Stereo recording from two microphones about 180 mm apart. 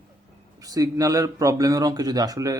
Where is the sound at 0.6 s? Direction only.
20° right (ahead or behind).